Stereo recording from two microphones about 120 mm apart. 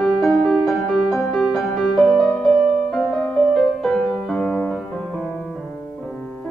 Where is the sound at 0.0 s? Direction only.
Centre (ahead or behind).